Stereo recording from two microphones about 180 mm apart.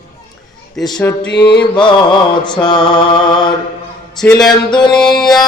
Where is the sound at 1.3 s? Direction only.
65° left (ahead or behind).